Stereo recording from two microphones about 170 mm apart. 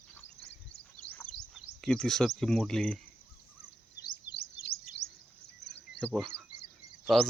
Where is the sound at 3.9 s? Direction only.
80° left.